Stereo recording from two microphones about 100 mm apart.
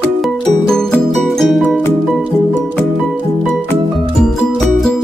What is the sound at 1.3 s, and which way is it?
Music, centre (ahead or behind).